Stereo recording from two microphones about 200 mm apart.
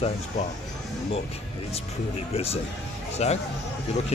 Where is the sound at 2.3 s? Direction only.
30° left (ahead or behind).